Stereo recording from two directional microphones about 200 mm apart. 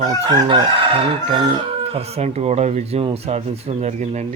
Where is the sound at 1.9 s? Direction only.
30° right (ahead or behind).